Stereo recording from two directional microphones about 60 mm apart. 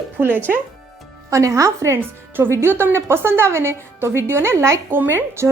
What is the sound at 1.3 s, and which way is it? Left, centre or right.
Speech, right.